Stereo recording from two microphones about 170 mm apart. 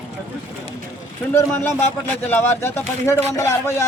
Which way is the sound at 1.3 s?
15° left (ahead or behind).